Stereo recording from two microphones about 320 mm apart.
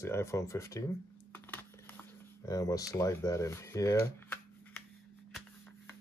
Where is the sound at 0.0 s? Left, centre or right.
Centre.